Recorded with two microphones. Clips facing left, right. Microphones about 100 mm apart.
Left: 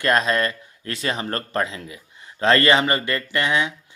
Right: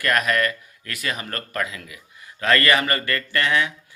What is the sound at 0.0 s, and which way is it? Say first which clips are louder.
Speech: left 2 dB; 25° left (ahead or behind).